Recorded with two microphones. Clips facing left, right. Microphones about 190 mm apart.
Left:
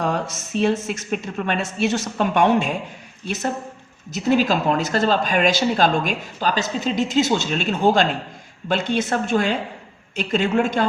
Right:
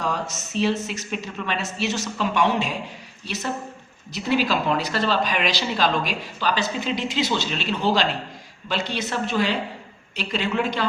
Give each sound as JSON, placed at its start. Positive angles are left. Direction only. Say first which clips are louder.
{"t": 0.5, "sound": "speech", "louder": "left 3 dB", "side_deg": 50}